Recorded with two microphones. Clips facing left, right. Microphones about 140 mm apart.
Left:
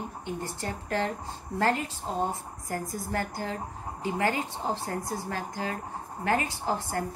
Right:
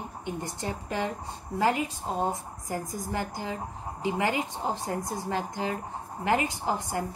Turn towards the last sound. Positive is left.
turn(degrees=-15)  # may be behind; listen again after turning